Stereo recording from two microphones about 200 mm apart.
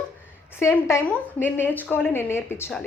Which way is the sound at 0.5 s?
10° left (ahead or behind).